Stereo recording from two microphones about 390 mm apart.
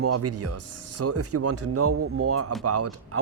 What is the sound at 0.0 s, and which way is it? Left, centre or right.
Speech, right.